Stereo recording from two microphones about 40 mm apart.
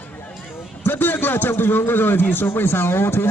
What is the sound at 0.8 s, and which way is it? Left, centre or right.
A man's voice, left.